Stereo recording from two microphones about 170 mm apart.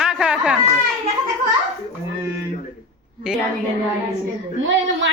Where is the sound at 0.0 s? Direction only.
5° right (ahead or behind).